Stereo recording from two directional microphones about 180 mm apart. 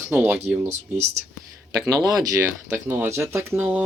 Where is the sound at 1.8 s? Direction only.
20° right (ahead or behind).